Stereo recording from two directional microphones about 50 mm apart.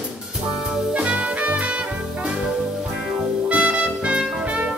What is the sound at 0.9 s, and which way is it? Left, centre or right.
Music, right.